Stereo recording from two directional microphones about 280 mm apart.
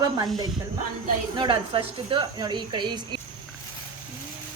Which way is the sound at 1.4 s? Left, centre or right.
Centre.